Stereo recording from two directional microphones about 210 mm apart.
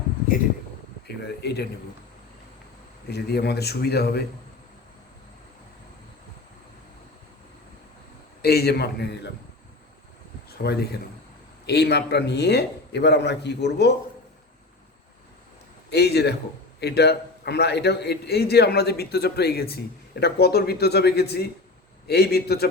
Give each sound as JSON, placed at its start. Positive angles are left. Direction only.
{"t": 1.0, "sound": "speech", "side_deg": 50}
{"t": 3.1, "sound": "a man's voice", "side_deg": 50}
{"t": 8.4, "sound": "a man's voice", "side_deg": 50}
{"t": 10.6, "sound": "a man's voice", "side_deg": 50}
{"t": 15.9, "sound": "a man's voice", "side_deg": 50}